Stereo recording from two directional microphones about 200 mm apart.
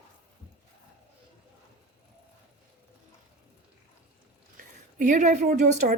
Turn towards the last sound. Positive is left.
turn(degrees=-40)  # may be behind; listen again after turning